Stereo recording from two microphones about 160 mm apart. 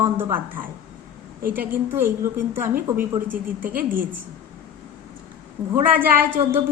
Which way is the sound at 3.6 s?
60° right (ahead or behind).